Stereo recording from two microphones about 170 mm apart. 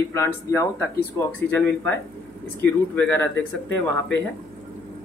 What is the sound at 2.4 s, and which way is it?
Speech, 10° left (ahead or behind).